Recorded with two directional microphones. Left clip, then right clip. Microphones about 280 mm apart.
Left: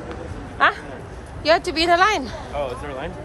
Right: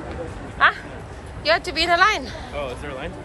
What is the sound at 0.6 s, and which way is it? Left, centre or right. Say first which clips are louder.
A woman's voice: even; centre.